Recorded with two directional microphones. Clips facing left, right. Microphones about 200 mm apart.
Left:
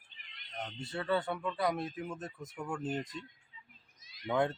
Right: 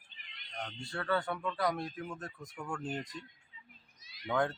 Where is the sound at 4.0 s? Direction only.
45° left (ahead or behind).